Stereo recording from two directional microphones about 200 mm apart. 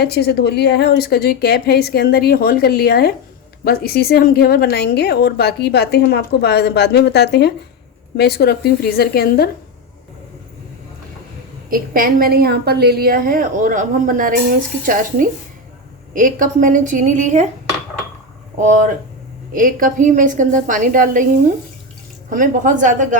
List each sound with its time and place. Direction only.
0.0 s a woman's voice: 55° left (ahead or behind)
11.7 s a woman's voice: 45° right (ahead or behind)
19.5 s a woman's voice: 40° right (ahead or behind)
22.3 s a woman's voice: 40° right (ahead or behind)